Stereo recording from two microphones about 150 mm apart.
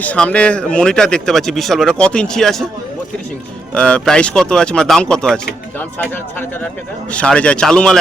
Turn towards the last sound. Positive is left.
turn(degrees=5)  # may be behind; listen again after turning